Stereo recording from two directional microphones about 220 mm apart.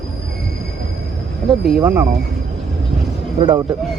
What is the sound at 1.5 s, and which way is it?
Speech, centre (ahead or behind).